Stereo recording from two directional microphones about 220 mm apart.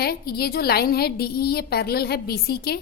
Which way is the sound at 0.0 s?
45° left (ahead or behind).